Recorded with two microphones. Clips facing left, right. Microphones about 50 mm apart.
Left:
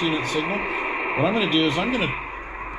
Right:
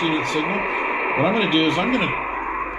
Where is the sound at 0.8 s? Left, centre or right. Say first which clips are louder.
Right 3 dB; centre.